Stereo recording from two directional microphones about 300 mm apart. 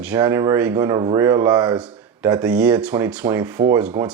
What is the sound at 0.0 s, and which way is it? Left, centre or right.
Speech, centre.